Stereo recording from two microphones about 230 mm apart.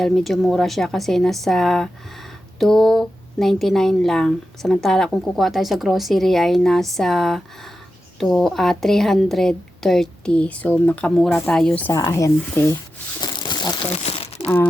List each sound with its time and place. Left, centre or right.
0.0 s speech: centre
13.2 s crumpling: centre
14.4 s speech: centre